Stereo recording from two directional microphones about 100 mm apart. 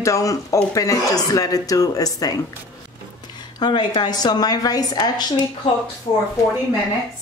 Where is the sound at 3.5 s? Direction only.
50° left (ahead or behind).